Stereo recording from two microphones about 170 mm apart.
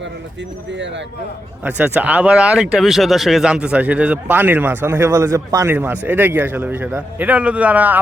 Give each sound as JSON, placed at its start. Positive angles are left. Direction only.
{"t": 0.7, "sound": "speech", "side_deg": -90}
{"t": 1.6, "sound": "speech", "side_deg": -10}